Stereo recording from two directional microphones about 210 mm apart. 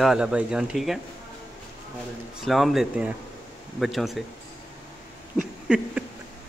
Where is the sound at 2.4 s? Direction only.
Centre (ahead or behind).